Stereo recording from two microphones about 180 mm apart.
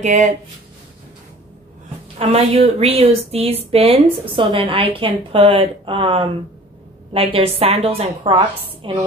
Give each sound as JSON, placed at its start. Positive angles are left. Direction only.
{"t": 0.0, "sound": "speech", "side_deg": -45}
{"t": 2.1, "sound": "a woman's voice", "side_deg": -35}